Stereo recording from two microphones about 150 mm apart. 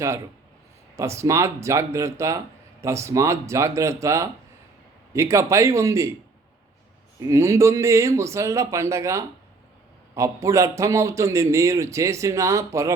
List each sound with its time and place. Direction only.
0.9 s a man's voice: 20° right (ahead or behind)
7.2 s a man's voice: 20° right (ahead or behind)